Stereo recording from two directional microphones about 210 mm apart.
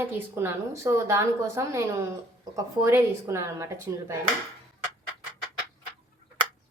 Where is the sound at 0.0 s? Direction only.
10° right (ahead or behind).